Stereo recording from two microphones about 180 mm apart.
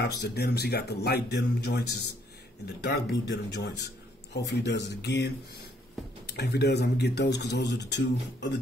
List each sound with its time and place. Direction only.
0.0 s a man's voice: 65° left (ahead or behind)